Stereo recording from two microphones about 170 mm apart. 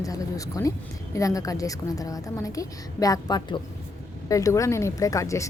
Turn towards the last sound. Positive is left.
turn(degrees=20)  # may be behind; listen again after turning